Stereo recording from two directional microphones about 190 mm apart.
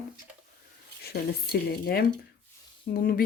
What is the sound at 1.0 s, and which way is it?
Speech, 55° left (ahead or behind).